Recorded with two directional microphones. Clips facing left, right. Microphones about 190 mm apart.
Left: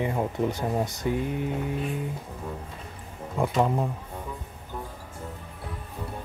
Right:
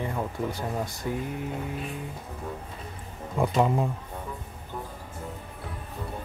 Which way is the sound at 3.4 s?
Centre (ahead or behind).